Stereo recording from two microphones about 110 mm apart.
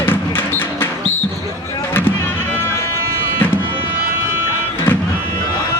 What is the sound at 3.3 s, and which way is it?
Music, 20° left (ahead or behind).